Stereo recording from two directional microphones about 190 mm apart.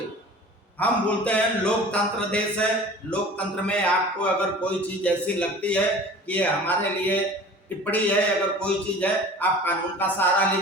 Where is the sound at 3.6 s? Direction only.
5° left (ahead or behind).